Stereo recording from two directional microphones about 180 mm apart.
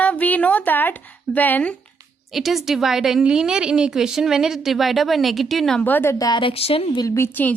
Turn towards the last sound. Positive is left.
turn(degrees=10)  # may be behind; listen again after turning